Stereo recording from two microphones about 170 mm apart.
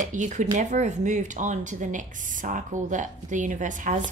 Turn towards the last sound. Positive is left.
turn(degrees=-50)  # may be behind; listen again after turning